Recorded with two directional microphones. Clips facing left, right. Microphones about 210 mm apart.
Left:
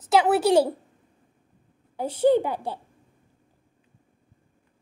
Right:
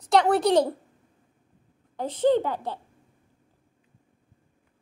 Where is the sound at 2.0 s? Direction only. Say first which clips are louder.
Left 2 dB; 10° left (ahead or behind).